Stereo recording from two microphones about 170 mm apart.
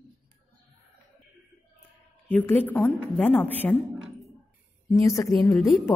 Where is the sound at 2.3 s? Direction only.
10° left (ahead or behind).